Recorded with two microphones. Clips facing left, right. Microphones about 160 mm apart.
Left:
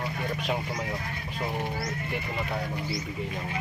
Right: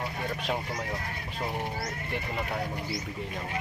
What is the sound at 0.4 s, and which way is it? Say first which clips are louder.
Speech: left 1 dB; centre (ahead or behind).